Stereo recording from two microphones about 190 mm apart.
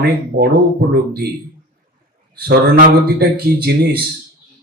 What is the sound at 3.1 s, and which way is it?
Speech, 55° right (ahead or behind).